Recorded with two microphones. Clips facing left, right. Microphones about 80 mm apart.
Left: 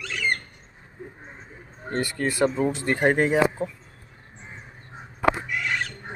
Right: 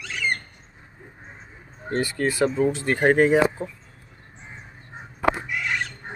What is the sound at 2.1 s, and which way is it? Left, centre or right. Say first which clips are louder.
Speech: even; centre.